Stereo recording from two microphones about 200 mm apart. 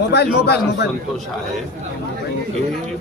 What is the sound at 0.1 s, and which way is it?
Speech, 55° left (ahead or behind).